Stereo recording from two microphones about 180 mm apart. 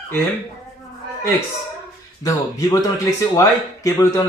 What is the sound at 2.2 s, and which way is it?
Speech, 20° left (ahead or behind).